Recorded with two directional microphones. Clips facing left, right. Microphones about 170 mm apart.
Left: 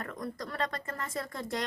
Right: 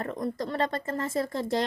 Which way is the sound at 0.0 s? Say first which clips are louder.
Right 7 dB; 25° right (ahead or behind).